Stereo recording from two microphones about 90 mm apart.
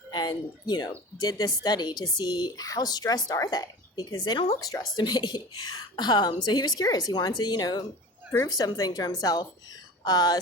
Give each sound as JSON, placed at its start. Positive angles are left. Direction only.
{"t": 0.1, "sound": "a woman's voice", "side_deg": 55}